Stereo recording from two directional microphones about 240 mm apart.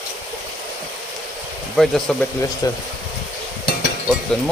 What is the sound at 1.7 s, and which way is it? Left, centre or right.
Speech, centre.